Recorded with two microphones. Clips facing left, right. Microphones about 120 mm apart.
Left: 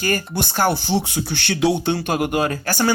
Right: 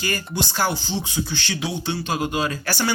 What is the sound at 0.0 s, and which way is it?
Speech, 50° left (ahead or behind).